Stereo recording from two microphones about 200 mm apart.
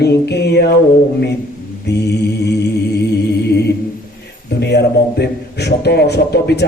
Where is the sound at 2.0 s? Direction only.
55° left (ahead or behind).